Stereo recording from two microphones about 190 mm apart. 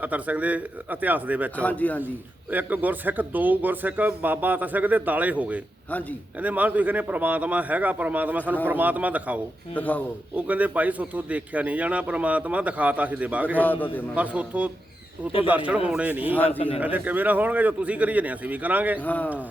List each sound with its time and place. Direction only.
0.0 s speech: 10° right (ahead or behind)
1.5 s speech: 10° left (ahead or behind)
2.5 s speech: 10° right (ahead or behind)
5.9 s speech: 10° left (ahead or behind)
6.4 s speech: 10° right (ahead or behind)
9.7 s speech: 10° left (ahead or behind)
10.3 s speech: 10° right (ahead or behind)
16.5 s a man's voice: 30° left (ahead or behind)
16.8 s speech: 10° right (ahead or behind)
18.9 s speech: 10° left (ahead or behind)